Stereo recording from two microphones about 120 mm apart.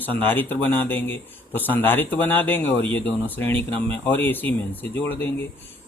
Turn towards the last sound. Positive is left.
turn(degrees=15)  # may be behind; listen again after turning